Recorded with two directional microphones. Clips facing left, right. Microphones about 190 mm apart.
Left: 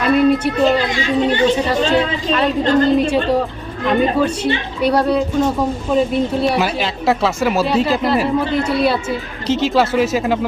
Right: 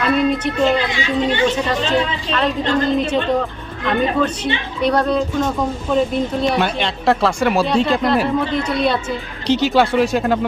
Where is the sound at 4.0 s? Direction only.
5° left (ahead or behind).